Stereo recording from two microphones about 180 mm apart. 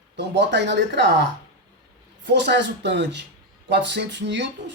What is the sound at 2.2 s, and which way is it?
A woman's voice, 75° right (ahead or behind).